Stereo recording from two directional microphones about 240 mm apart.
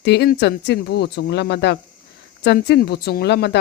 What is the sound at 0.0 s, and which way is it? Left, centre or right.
Speech, left.